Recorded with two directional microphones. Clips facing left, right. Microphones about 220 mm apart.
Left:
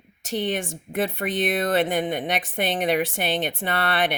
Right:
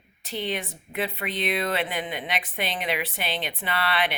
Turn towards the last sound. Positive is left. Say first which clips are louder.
# left 3 dB
turn(degrees=45)  # may be behind; listen again after turning